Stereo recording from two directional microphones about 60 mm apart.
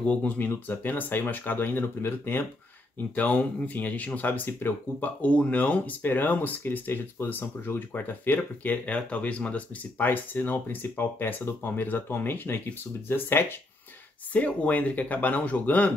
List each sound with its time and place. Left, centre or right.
0.0 s speech: left
0.4 s speech: left
3.2 s speech: left
14.3 s speech: left